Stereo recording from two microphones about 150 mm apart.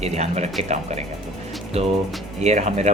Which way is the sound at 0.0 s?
45° right (ahead or behind).